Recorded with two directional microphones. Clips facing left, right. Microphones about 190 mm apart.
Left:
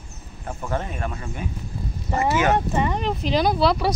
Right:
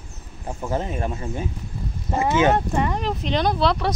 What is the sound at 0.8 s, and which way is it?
Speech, 30° right (ahead or behind).